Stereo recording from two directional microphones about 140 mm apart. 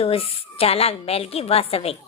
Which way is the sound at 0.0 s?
45° left (ahead or behind).